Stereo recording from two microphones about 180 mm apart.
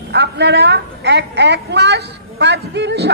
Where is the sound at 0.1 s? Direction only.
65° right (ahead or behind).